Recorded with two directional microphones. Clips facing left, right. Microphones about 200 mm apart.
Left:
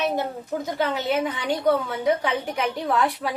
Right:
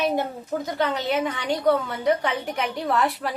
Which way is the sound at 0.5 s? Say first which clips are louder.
Even; centre (ahead or behind).